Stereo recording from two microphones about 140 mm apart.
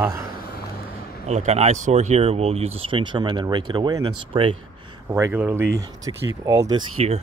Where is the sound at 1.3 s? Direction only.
55° right (ahead or behind); by 4.2 s 30° right (ahead or behind).